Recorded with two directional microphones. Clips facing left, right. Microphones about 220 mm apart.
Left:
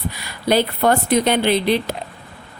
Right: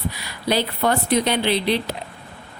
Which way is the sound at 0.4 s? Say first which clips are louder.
Left 4 dB; 50° left (ahead or behind).